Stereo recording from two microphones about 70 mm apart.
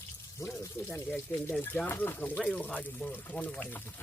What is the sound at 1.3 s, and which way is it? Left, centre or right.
Speech, left.